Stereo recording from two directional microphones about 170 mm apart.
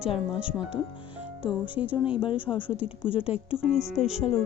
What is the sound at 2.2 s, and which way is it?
Speech, 30° left (ahead or behind).